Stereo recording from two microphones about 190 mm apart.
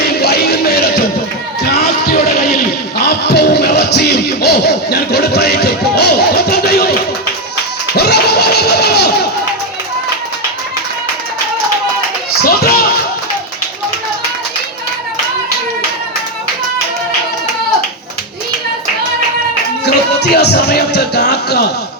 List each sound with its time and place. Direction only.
0.0 s music: 55° left (ahead or behind)
1.7 s a sound: 55° left (ahead or behind)
3.0 s music: 60° left (ahead or behind)
7.9 s music: 60° left (ahead or behind)
12.4 s a sound: 50° left (ahead or behind)
19.8 s music: 60° left (ahead or behind)